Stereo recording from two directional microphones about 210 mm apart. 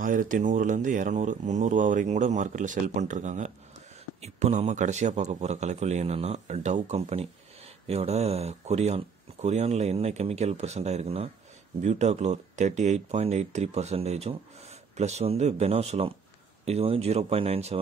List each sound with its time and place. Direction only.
0.0 s speech: 40° right (ahead or behind)